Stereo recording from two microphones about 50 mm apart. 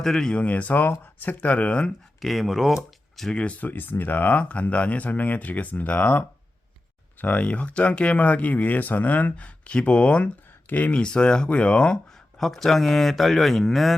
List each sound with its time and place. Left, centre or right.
0.0 s speech: centre
0.3 s speech: left
2.2 s speech: centre
3.2 s speech: centre
3.6 s speech: left
7.2 s speech: left
9.6 s speech: left
10.7 s speech: left
10.9 s speech: centre
12.4 s speech: centre